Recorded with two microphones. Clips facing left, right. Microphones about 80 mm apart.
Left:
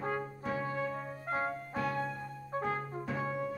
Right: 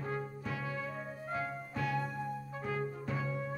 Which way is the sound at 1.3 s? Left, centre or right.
Left.